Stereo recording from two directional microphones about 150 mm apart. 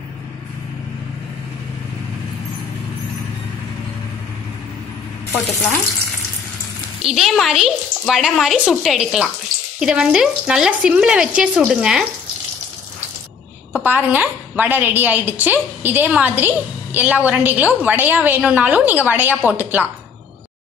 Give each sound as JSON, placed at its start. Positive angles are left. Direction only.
{"t": 7.0, "sound": "a woman's voice", "side_deg": 0}
{"t": 13.8, "sound": "a woman's voice", "side_deg": -10}